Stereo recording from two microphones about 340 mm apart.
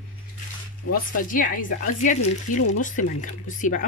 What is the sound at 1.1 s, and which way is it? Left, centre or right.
Speech, left.